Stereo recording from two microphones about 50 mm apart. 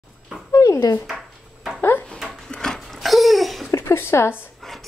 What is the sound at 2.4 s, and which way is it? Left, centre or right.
Wood, centre.